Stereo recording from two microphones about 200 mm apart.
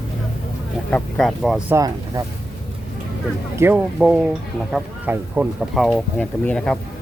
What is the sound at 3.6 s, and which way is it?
Speech, 10° right (ahead or behind).